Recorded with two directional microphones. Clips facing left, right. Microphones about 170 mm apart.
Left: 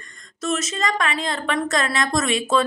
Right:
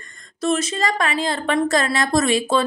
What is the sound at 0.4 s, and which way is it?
A woman's voice, 30° right (ahead or behind).